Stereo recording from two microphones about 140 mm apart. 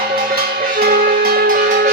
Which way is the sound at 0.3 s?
90° right.